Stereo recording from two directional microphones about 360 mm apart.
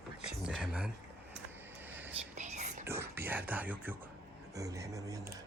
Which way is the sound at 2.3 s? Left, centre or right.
Centre.